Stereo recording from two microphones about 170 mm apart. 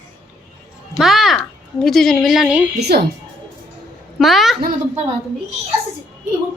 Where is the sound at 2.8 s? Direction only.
70° right (ahead or behind).